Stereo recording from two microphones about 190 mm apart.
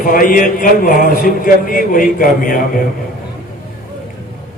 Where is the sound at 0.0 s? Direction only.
45° left (ahead or behind).